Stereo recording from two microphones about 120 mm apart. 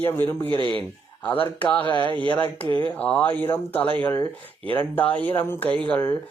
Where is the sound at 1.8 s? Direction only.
40° left (ahead or behind).